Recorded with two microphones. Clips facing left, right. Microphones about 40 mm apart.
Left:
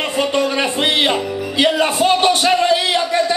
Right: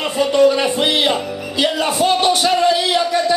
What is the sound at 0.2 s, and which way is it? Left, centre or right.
Speech, left.